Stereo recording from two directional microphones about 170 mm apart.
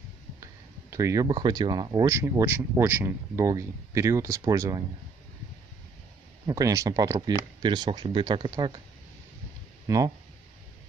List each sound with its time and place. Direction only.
0.4 s speech: 20° right (ahead or behind)
6.4 s speech: 20° right (ahead or behind)
9.8 s speech: 20° right (ahead or behind)